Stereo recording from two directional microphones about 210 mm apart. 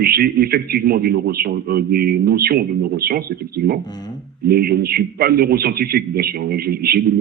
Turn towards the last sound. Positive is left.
turn(degrees=-45)  # may be behind; listen again after turning